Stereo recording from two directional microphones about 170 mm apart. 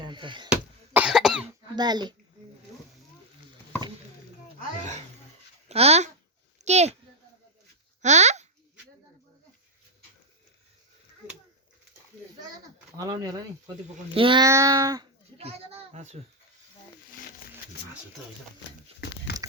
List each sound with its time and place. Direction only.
0.0 s chop: 30° right (ahead or behind)
0.5 s cough: 5° right (ahead or behind)
1.7 s speech: 25° right (ahead or behind)
5.6 s a child's voice: 40° right (ahead or behind)
8.0 s a sound: 40° right (ahead or behind)
13.0 s speech: 20° right (ahead or behind)
14.4 s speech: 20° right (ahead or behind)
15.4 s a child's voice: 35° right (ahead or behind)
18.9 s crumpling: 80° left